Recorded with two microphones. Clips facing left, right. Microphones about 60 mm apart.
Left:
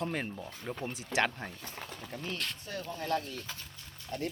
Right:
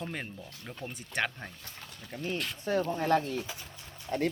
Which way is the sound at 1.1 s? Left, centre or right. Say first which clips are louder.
Left 2 dB; centre.